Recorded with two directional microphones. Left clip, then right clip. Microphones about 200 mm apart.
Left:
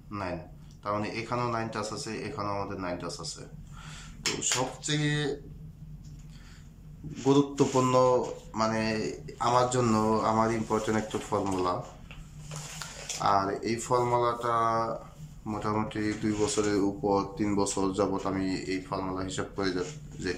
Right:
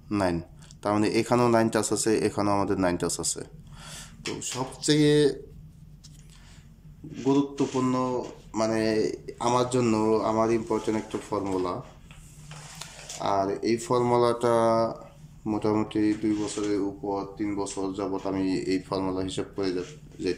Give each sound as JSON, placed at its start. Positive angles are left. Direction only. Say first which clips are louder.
{"t": 0.1, "sound": "speech", "louder": "right 8 dB", "side_deg": -30}
{"t": 7.2, "sound": "a sound", "louder": "left 1 dB", "side_deg": 5}
{"t": 8.5, "sound": "speech", "louder": "right 3 dB", "side_deg": -15}
{"t": 12.7, "sound": "speech", "louder": "left 1 dB", "side_deg": -15}
{"t": 16.7, "sound": "speech", "louder": "left 2 dB", "side_deg": 5}
{"t": 18.2, "sound": "speech", "louder": "right 3 dB", "side_deg": -10}